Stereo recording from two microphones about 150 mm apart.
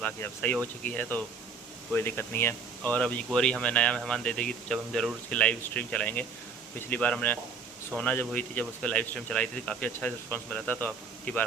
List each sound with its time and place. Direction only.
0.0 s speech: 10° left (ahead or behind)